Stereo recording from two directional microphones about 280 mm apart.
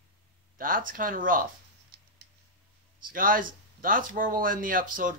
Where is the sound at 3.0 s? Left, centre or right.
Right.